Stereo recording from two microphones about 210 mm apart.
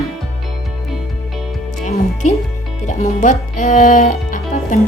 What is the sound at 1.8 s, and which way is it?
Speech, 35° left (ahead or behind).